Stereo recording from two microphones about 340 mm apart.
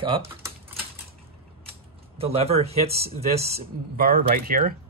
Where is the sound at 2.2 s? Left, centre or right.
Centre.